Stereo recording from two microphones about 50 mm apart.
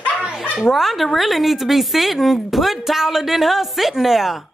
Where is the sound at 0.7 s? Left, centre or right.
Centre.